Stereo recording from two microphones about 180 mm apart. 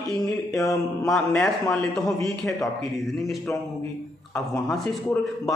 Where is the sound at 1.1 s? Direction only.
5° left (ahead or behind).